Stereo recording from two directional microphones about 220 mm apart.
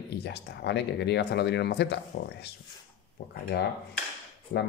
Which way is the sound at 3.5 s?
50° left (ahead or behind).